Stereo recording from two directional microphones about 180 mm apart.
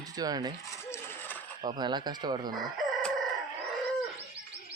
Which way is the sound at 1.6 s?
25° right (ahead or behind).